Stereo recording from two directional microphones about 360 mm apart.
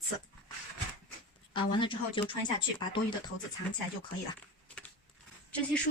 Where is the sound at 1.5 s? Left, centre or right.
Centre.